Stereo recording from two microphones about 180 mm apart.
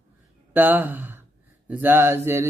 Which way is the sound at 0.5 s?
10° right (ahead or behind).